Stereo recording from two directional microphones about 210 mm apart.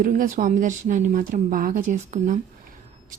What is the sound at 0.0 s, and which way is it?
A woman's voice, 40° right (ahead or behind).